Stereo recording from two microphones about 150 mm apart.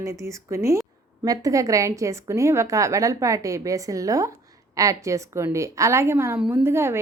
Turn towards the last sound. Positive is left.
turn(degrees=-15)  # may be behind; listen again after turning